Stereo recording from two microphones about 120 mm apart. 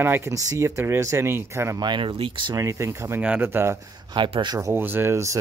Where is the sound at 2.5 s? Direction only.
25° right (ahead or behind).